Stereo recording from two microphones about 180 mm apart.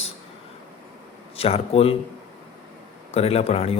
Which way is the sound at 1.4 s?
35° left (ahead or behind).